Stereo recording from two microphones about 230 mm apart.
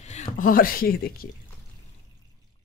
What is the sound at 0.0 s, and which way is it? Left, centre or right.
Speech, left.